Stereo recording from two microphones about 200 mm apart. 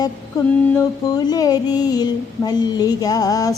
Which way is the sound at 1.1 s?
20° left (ahead or behind).